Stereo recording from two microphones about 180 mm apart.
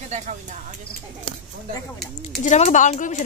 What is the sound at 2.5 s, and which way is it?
Speech, 40° left (ahead or behind).